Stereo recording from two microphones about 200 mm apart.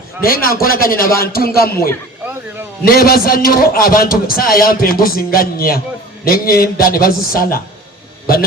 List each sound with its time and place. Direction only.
0.2 s a man's voice: 45° left (ahead or behind)